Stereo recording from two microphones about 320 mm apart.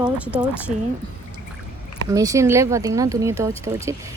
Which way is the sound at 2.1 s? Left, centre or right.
Centre.